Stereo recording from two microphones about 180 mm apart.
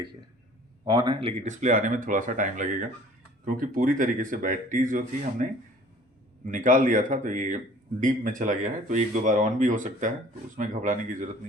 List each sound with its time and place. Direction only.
0.9 s speech: 25° right (ahead or behind)
1.5 s speech: 45° right (ahead or behind)